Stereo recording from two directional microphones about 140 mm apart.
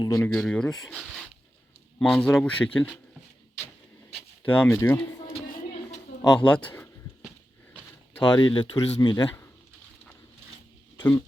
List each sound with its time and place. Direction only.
0.0 s speech: 25° left (ahead or behind)
0.3 s speech: 5° left (ahead or behind)
4.4 s speech: 10° left (ahead or behind)
6.2 s speech: 10° left (ahead or behind)
8.2 s speech: 35° left (ahead or behind)